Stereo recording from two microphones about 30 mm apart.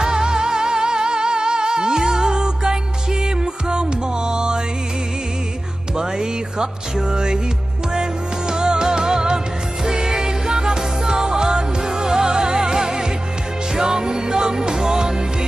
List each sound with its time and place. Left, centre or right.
0.0 s music: right
5.9 s music: right